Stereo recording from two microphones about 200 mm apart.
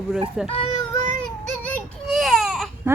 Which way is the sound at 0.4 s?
30° left (ahead or behind).